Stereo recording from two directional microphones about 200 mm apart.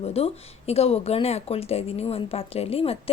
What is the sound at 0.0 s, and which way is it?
Speech, 30° left (ahead or behind).